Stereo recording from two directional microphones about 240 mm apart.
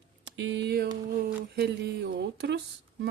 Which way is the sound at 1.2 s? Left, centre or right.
Right.